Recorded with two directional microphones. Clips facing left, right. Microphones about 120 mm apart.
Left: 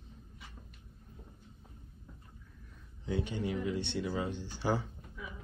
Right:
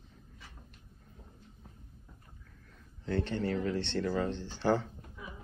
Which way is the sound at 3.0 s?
10° left (ahead or behind).